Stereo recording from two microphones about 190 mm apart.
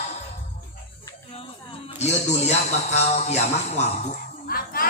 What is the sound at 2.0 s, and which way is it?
A man's voice, 35° left (ahead or behind).